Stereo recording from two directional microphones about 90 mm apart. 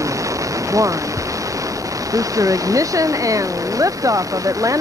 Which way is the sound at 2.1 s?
40° right (ahead or behind).